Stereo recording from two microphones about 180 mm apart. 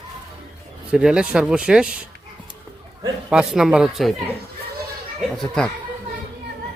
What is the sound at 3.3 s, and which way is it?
Speech, 5° right (ahead or behind).